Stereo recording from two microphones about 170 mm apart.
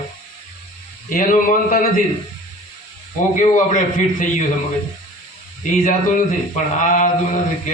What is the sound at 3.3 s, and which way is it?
Speech, 50° left (ahead or behind).